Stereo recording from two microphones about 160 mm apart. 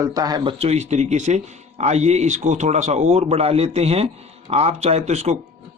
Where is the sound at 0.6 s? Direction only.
40° right (ahead or behind).